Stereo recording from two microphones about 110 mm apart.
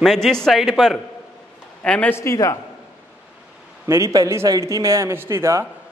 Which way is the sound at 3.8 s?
25° right (ahead or behind).